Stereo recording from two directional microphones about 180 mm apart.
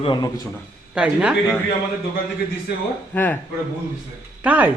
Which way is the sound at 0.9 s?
5° right (ahead or behind).